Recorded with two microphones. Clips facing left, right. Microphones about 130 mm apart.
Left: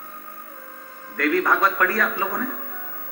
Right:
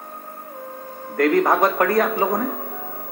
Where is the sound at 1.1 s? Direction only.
40° right (ahead or behind).